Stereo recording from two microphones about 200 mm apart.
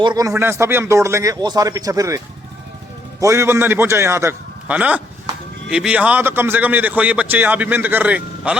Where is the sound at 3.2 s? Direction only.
15° right (ahead or behind).